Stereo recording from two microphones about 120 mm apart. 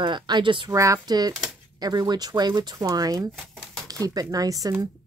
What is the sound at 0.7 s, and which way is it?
Speech, 25° right (ahead or behind).